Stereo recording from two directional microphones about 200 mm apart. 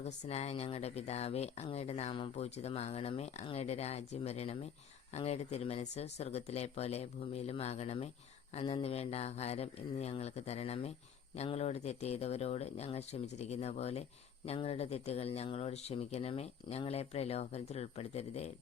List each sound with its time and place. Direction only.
0.0 s speech: 30° left (ahead or behind)